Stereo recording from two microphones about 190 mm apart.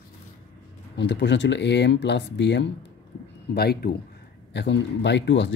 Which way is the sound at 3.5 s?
55° left (ahead or behind).